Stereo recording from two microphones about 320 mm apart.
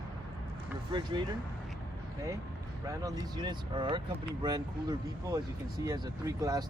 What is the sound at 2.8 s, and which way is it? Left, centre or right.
Speech, centre.